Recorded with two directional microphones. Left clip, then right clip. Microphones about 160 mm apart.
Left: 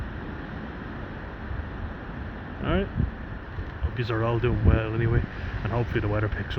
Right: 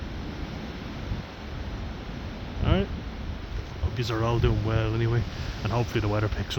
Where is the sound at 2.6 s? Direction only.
20° right (ahead or behind).